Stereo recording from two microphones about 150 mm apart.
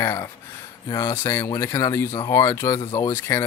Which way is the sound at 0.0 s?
15° left (ahead or behind).